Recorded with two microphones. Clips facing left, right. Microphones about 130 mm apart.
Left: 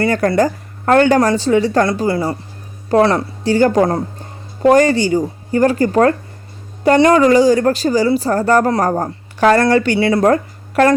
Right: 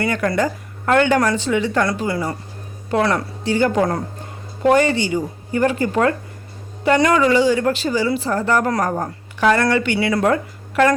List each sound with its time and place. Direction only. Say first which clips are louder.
0.0 s a woman's voice: left 5 dB; 35° left (ahead or behind)
3.5 s a woman's voice: left 5 dB; 40° left (ahead or behind)